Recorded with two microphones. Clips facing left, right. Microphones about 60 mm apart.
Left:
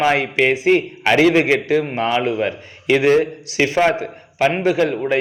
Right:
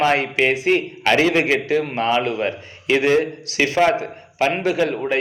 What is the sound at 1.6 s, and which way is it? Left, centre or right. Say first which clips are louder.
Speech: left 2 dB; left.